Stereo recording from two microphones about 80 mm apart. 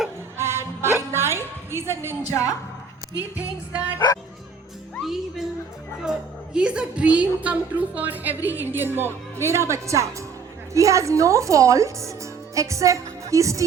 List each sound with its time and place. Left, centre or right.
0.3 s music: right
2.3 s a woman's voice: left
3.3 s music: centre
5.0 s music: centre
6.0 s a woman's voice: centre; by 13.7 s right